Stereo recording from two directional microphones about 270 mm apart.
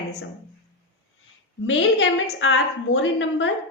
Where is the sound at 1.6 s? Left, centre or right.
Left.